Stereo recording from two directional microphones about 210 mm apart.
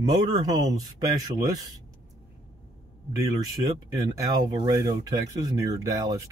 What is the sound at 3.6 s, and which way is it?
Speech, 20° right (ahead or behind).